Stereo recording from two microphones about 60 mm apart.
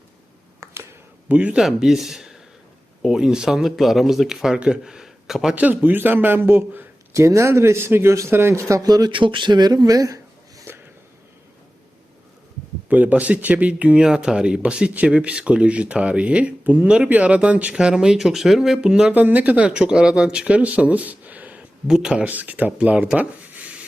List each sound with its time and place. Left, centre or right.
0.6 s a sound: right
1.3 s speech: right
1.5 s speech: centre
5.5 s a man's voice: right
7.1 s a man's voice: right
8.8 s speech: right
10.7 s a sound: right
12.9 s speech: right; by 18.8 s centre
18.8 s speech: centre
19.1 s speech: right
19.6 s speech: centre
21.8 s speech: centre
22.2 s speech: right
23.1 s rub: right